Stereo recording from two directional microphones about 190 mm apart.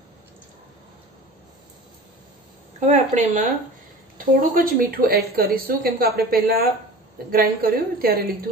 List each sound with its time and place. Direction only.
2.8 s a woman's voice: 40° right (ahead or behind)